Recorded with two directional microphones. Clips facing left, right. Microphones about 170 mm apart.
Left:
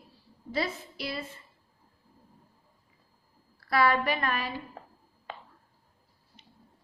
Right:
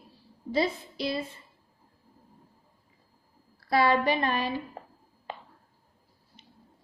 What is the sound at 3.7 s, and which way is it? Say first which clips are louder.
A woman's voice: right 2 dB; 25° right (ahead or behind).